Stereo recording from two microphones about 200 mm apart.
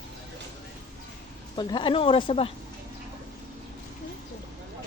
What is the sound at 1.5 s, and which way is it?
Speech, 25° left (ahead or behind).